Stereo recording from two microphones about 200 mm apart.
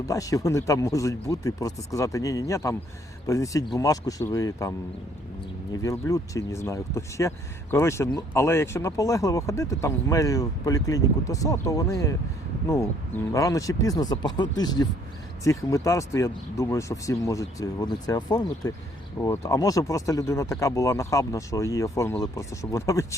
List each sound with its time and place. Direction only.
0.0 s speech: 15° left (ahead or behind)
5.8 s speech: 15° left (ahead or behind)